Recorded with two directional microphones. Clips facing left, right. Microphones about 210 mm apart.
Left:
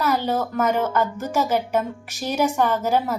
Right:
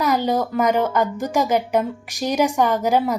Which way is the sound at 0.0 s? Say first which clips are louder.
Right 2 dB; 15° right (ahead or behind).